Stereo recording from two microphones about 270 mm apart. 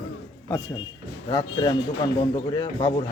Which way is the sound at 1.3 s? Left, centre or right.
Centre.